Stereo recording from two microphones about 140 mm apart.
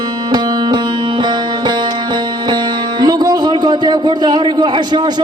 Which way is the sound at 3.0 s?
30° right (ahead or behind).